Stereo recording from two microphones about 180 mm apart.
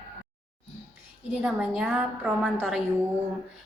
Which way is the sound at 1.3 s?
5° right (ahead or behind).